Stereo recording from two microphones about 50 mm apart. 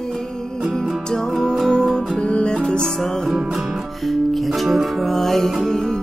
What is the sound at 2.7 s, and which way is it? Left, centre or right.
Music, centre.